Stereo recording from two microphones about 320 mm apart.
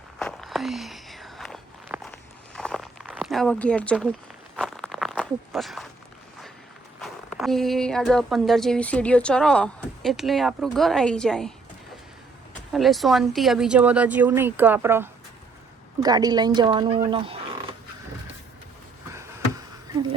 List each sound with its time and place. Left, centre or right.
0.2 s walk: centre
2.6 s a sound: centre
7.0 s speech: centre
12.7 s speech: centre